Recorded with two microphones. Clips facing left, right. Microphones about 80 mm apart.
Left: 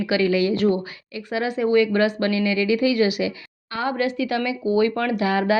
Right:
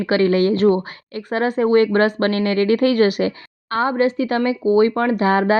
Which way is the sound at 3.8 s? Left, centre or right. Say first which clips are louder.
Right 4 dB; right.